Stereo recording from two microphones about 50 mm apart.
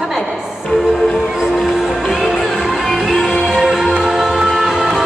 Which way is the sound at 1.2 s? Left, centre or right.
Centre.